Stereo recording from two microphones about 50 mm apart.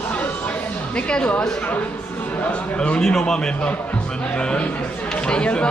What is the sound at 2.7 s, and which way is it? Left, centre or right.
Speech, centre.